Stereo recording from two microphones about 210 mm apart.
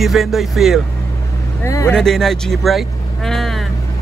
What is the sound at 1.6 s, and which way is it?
Speech, 15° left (ahead or behind).